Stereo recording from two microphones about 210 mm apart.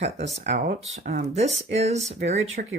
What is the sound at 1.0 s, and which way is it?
Speech, 45° right (ahead or behind).